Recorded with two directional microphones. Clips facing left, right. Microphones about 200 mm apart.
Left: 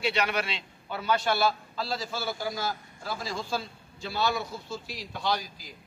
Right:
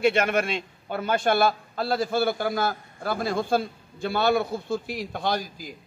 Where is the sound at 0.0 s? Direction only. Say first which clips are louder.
Right 7 dB; 50° right (ahead or behind).